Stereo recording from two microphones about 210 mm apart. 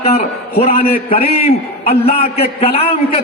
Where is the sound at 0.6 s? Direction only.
35° left (ahead or behind).